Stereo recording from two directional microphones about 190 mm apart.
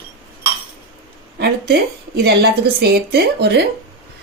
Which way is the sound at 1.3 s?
60° right (ahead or behind).